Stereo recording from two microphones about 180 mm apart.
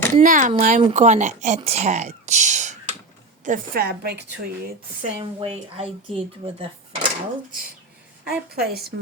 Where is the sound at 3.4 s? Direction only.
50° right (ahead or behind).